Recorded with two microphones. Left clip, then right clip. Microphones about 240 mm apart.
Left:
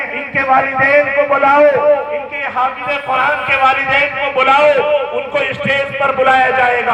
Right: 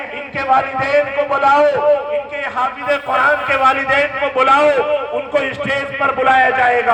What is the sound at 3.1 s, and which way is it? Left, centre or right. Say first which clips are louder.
Speech: left 1 dB; right.